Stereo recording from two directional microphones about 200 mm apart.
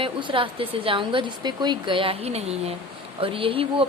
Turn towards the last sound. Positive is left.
turn(degrees=-25)  # may be behind; listen again after turning